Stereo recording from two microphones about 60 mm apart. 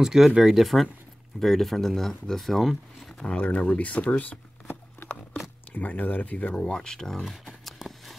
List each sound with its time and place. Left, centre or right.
0.0 s speech: centre
3.1 s a sound: centre
3.3 s speech: left
4.2 s a sound: left
5.7 s speech: left
6.3 s speech: centre